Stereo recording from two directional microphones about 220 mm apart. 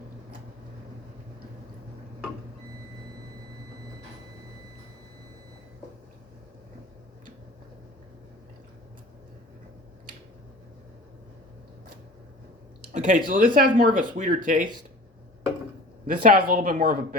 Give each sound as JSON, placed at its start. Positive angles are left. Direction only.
{"t": 12.9, "sound": "speech", "side_deg": -35}
{"t": 16.2, "sound": "speech", "side_deg": -40}